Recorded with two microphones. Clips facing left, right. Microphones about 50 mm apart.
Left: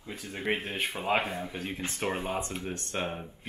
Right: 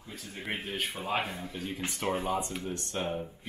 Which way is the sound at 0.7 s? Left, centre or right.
Left.